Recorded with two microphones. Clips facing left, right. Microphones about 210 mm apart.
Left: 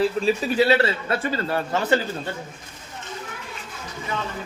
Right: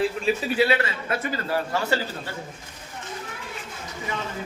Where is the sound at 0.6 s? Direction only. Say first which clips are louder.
Left 4 dB; 35° left (ahead or behind).